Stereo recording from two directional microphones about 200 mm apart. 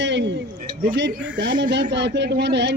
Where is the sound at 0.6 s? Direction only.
45° right (ahead or behind).